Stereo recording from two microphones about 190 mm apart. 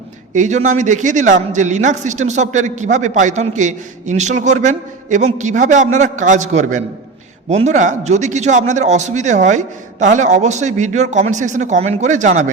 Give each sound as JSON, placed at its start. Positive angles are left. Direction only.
{"t": 0.3, "sound": "a man's voice", "side_deg": -40}